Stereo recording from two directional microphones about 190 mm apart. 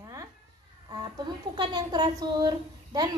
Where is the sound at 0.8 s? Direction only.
25° right (ahead or behind).